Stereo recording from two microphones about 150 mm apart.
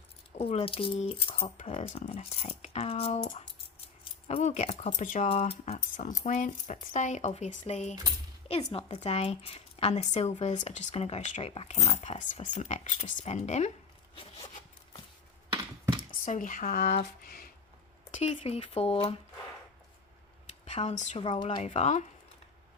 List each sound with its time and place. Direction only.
0.3 s speech: 40° left (ahead or behind)
4.3 s speech: 45° left (ahead or behind)
4.9 s speech: 60° left (ahead or behind)
5.3 s speech: 40° left (ahead or behind)
16.0 s speech: 60° left (ahead or behind); by 17.5 s 85° left
18.1 s speech: 45° left (ahead or behind)
20.7 s a woman's voice: 50° left (ahead or behind)
21.2 s speech: 30° left (ahead or behind)
21.4 s speech: 50° left (ahead or behind)